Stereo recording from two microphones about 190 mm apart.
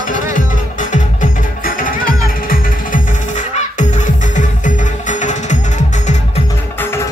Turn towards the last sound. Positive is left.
turn(degrees=40)  # may be behind; listen again after turning